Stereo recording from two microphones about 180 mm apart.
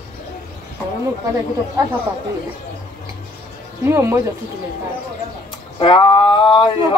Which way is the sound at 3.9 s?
15° right (ahead or behind).